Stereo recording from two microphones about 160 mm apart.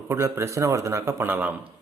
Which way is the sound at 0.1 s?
15° right (ahead or behind).